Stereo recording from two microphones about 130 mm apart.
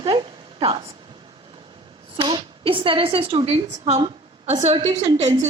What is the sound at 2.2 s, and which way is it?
A woman's voice, 40° right (ahead or behind).